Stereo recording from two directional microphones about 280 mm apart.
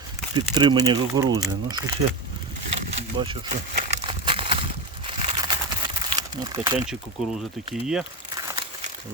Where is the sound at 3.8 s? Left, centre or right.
Right.